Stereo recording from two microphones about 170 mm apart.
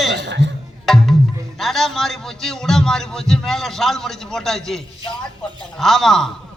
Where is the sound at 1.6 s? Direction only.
Centre (ahead or behind).